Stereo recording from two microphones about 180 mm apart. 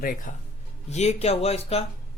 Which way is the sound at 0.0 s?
50° left (ahead or behind).